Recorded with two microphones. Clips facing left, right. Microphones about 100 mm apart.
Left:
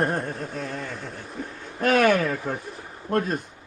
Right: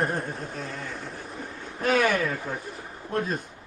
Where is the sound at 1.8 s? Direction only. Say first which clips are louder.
Left 4 dB; 60° left (ahead or behind).